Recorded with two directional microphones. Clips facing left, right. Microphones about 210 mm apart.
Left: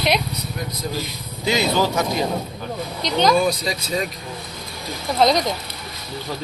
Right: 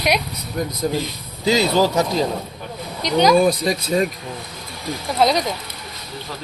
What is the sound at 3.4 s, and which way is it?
Speech, 50° right (ahead or behind).